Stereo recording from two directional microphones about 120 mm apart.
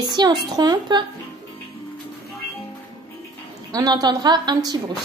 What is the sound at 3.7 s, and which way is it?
A child's voice, 35° right (ahead or behind).